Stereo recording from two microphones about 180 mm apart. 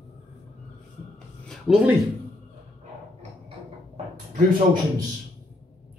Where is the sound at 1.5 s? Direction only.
Centre (ahead or behind).